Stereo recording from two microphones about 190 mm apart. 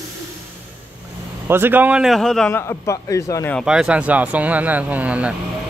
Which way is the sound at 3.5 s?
5° right (ahead or behind).